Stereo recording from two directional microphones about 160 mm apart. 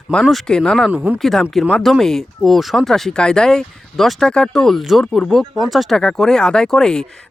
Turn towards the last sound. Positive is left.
turn(degrees=5)  # may be behind; listen again after turning